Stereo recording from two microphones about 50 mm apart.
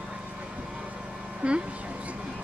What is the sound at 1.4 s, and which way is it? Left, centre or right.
Speech, right.